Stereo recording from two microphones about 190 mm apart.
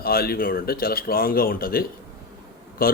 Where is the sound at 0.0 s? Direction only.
55° left (ahead or behind).